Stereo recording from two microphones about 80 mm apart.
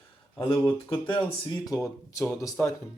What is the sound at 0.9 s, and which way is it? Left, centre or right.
Speech, left.